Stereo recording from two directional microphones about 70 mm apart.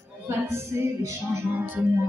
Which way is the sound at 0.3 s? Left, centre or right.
Right.